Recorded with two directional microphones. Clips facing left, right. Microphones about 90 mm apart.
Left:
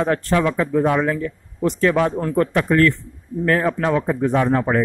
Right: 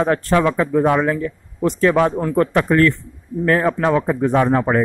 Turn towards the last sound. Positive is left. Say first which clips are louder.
# right 2 dB
turn(degrees=-40)  # may be behind; listen again after turning